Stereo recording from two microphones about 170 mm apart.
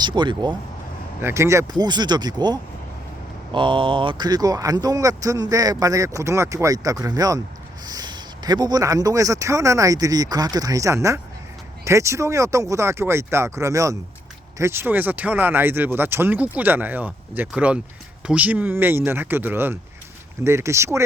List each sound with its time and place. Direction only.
0.0 s speech: 25° right (ahead or behind)
1.2 s speech: 15° right (ahead or behind)